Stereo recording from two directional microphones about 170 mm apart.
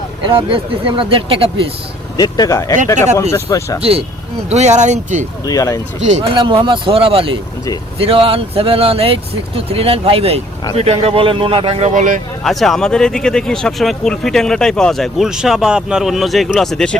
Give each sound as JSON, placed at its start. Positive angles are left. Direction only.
{"t": 0.3, "sound": "speech", "side_deg": -30}
{"t": 2.1, "sound": "speech", "side_deg": 25}
{"t": 3.8, "sound": "speech", "side_deg": -35}
{"t": 5.5, "sound": "speech", "side_deg": 20}
{"t": 6.1, "sound": "speech", "side_deg": -40}
{"t": 6.3, "sound": "speech", "side_deg": -30}
{"t": 11.9, "sound": "speech", "side_deg": -50}
{"t": 12.4, "sound": "speech", "side_deg": 0}